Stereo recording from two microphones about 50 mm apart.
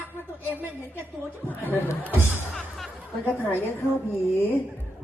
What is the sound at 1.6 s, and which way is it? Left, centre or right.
Chatter, left.